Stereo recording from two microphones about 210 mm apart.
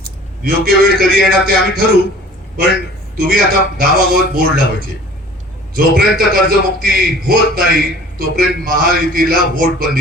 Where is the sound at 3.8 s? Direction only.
45° right (ahead or behind).